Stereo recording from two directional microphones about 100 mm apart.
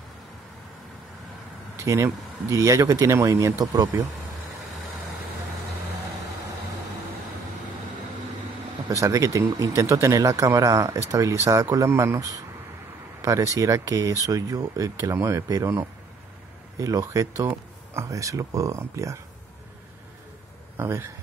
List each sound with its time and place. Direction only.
1.8 s speech: 25° right (ahead or behind)
8.8 s speech: 35° right (ahead or behind)
20.7 s speech: 25° right (ahead or behind)